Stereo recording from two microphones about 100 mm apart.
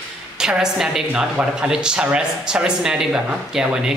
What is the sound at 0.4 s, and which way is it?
Speech, 5° right (ahead or behind).